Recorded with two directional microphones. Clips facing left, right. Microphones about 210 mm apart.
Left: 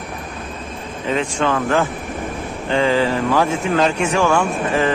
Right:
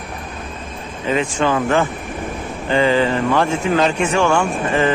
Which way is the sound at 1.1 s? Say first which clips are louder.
Right 1 dB; 5° right (ahead or behind).